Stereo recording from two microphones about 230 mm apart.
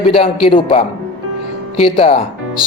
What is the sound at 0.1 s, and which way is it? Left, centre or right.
Speech, left.